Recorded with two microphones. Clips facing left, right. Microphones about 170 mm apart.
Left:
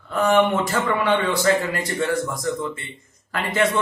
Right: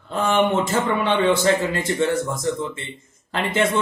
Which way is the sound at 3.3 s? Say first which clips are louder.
Right 1 dB; 25° right (ahead or behind).